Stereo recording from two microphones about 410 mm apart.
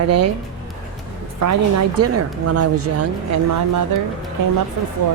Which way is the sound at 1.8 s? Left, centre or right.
Right.